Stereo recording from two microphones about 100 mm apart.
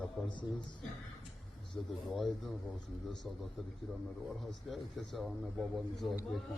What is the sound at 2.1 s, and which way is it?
Speech, centre (ahead or behind).